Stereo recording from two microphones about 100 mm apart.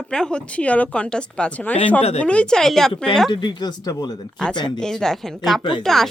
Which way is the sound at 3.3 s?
50° left (ahead or behind).